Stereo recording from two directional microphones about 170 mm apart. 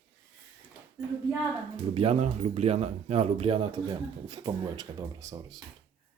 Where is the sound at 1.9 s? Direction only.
35° right (ahead or behind); by 5.6 s 20° right (ahead or behind).